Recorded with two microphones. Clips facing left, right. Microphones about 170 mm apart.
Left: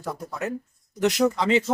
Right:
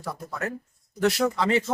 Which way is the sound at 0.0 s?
20° left (ahead or behind).